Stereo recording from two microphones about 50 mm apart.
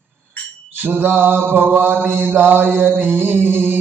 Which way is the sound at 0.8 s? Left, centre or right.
Right.